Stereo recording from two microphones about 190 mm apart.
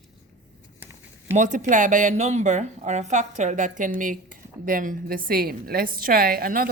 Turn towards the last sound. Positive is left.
turn(degrees=-50)  # may be behind; listen again after turning